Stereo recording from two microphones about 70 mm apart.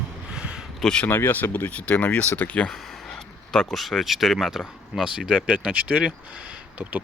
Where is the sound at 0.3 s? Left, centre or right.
Centre.